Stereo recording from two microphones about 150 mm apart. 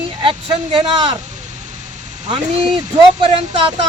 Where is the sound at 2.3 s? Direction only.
35° right (ahead or behind).